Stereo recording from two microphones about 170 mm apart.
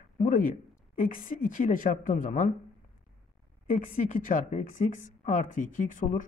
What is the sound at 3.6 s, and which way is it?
Speech, 45° left (ahead or behind).